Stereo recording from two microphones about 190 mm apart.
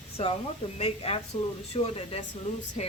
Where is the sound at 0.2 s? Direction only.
30° left (ahead or behind).